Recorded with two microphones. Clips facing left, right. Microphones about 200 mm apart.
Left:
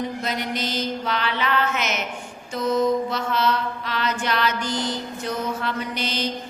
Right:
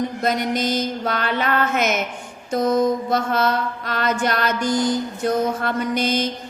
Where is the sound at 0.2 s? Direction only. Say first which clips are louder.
Right 6 dB; 45° right (ahead or behind).